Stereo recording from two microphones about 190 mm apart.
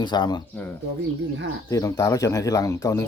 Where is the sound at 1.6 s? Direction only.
20° left (ahead or behind).